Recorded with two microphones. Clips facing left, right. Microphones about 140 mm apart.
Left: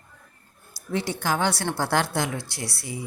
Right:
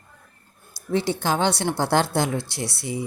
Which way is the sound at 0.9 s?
25° right (ahead or behind).